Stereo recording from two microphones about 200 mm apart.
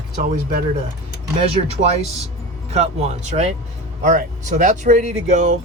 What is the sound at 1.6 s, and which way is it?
Speech, 30° right (ahead or behind).